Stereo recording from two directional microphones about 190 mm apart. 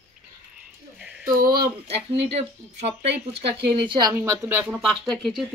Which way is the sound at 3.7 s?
25° right (ahead or behind).